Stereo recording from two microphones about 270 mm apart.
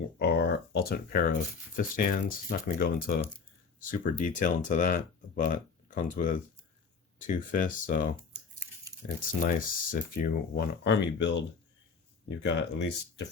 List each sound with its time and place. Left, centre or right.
0.2 s speech: left
9.4 s speech: left
10.5 s speech: left